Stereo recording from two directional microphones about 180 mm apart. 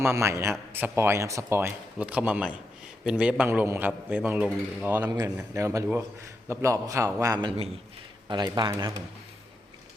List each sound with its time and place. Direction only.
0.0 s a man's voice: 15° right (ahead or behind)